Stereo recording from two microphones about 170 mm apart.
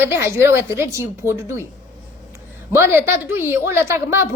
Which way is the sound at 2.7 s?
15° right (ahead or behind).